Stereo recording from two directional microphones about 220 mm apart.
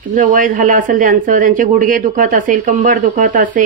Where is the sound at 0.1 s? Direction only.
35° right (ahead or behind).